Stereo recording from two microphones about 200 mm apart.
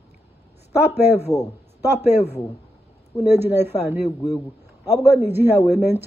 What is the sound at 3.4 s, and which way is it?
Speech, 10° right (ahead or behind).